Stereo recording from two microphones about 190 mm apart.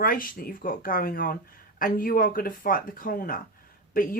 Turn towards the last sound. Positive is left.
turn(degrees=45)  # may be behind; listen again after turning